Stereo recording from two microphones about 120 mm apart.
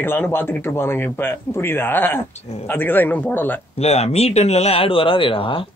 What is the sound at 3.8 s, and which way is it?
Speech, 60° left (ahead or behind).